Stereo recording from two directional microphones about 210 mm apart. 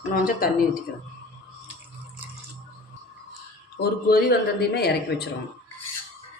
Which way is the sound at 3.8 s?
45° left (ahead or behind).